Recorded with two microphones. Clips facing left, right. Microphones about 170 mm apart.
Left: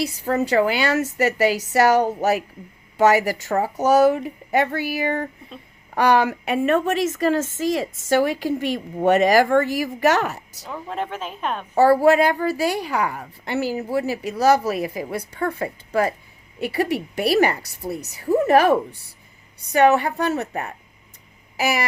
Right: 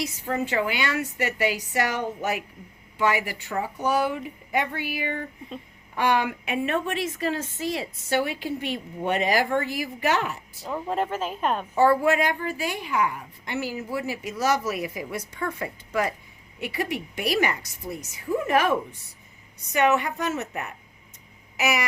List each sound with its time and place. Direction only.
0.0 s a woman's voice: 35° left (ahead or behind)
10.8 s speech: 5° right (ahead or behind)
11.7 s a woman's voice: 35° left (ahead or behind)